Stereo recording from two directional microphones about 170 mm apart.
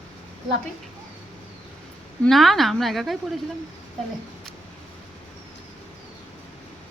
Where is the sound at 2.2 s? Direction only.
Centre (ahead or behind).